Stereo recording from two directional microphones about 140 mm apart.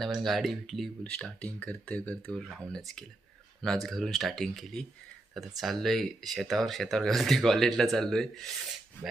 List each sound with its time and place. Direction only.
0.0 s speech: centre (ahead or behind)